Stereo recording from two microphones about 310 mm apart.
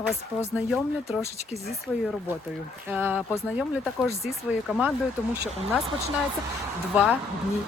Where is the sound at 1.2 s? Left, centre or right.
Left.